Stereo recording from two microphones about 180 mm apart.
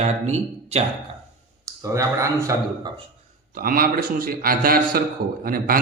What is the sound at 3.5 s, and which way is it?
A man's voice, 50° right (ahead or behind).